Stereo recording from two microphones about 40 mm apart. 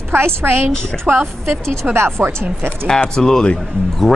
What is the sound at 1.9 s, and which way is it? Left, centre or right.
Speech, right.